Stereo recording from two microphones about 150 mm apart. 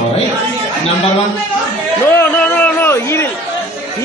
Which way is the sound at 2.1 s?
10° left (ahead or behind).